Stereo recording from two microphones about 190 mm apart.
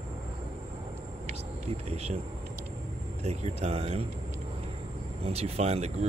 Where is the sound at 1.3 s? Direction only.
35° right (ahead or behind).